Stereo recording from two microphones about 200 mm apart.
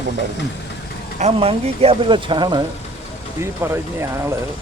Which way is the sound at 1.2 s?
30° right (ahead or behind).